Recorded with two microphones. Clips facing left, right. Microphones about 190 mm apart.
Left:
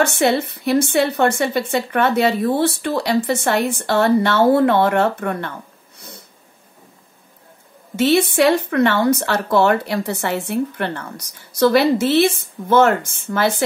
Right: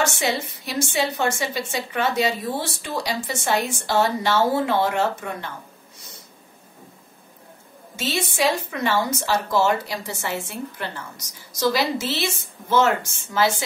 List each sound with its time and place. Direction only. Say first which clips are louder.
0.0 s speech: left 7 dB; 60° left (ahead or behind)
7.9 s speech: left 12 dB; 60° left (ahead or behind)